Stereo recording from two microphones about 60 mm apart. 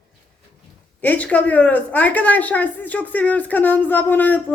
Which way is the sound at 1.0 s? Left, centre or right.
Left.